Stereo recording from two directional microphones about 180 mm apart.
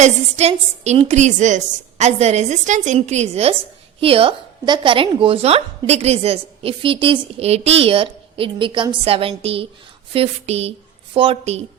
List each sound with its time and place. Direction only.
0.0 s speech: 40° right (ahead or behind)